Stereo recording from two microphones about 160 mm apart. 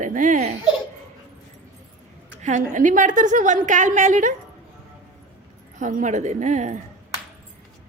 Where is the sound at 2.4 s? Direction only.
50° right (ahead or behind).